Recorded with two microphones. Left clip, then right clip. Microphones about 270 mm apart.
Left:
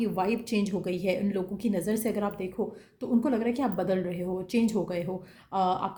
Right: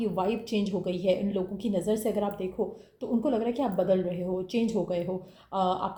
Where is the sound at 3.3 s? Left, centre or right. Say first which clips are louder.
Right 1 dB; left.